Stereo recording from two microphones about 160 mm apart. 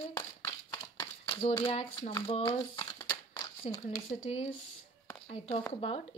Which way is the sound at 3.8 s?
40° left (ahead or behind).